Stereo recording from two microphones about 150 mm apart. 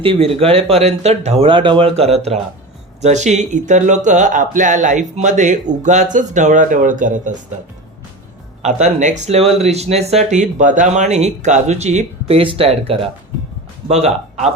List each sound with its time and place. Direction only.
0.0 s speech: 40° right (ahead or behind); by 7.3 s 60° right (ahead or behind)
8.6 s a man's voice: 50° right (ahead or behind)